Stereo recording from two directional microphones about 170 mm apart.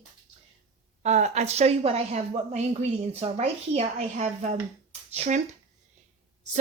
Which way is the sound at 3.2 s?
40° right (ahead or behind).